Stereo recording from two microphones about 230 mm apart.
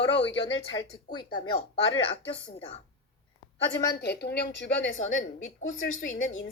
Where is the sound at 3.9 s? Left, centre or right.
Left.